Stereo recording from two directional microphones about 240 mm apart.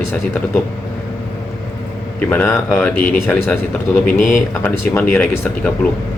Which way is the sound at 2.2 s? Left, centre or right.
Centre.